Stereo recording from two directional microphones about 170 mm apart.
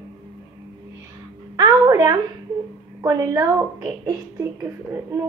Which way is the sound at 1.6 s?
20° right (ahead or behind).